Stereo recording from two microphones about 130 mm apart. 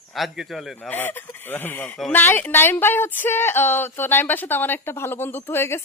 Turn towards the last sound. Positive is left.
turn(degrees=20)  # may be behind; listen again after turning